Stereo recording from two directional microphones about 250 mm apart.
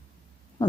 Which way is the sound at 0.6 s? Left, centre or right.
Centre.